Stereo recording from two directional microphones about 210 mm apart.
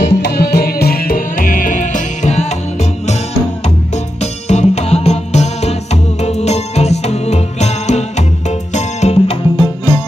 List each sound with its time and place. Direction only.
0.0 s music: 50° left (ahead or behind); by 10.0 s 25° left (ahead or behind)